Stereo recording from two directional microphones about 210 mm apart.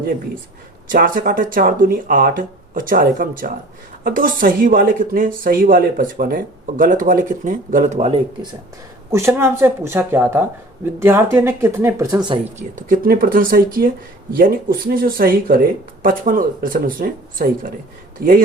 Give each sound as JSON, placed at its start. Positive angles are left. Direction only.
{"t": 0.9, "sound": "speech", "side_deg": -40}
{"t": 9.1, "sound": "a woman's voice", "side_deg": -10}
{"t": 12.5, "sound": "speech", "side_deg": -40}